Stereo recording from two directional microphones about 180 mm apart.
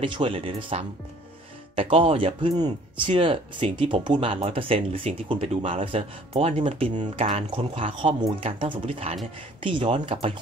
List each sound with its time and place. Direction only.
0.0 s speech: 30° right (ahead or behind)